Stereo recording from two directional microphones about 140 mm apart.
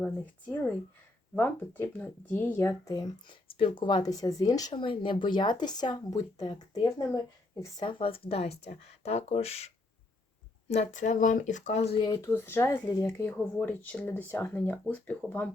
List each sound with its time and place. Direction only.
0.0 s speech: 10° left (ahead or behind); by 6.6 s 30° left (ahead or behind)
7.6 s a woman's voice: 35° left (ahead or behind)
12.0 s speech: 30° left (ahead or behind)
12.3 s speech: 15° left (ahead or behind)